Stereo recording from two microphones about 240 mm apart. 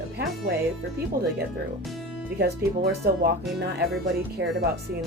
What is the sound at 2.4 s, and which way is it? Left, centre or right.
Speech, right.